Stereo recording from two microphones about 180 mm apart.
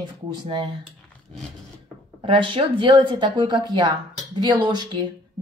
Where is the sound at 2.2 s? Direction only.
30° right (ahead or behind).